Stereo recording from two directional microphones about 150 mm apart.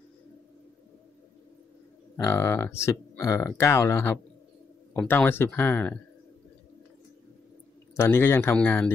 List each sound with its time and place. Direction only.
2.1 s speech: 20° left (ahead or behind)
7.9 s speech: 15° left (ahead or behind)